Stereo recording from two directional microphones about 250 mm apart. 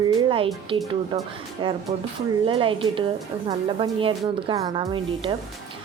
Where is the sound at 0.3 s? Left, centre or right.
Right.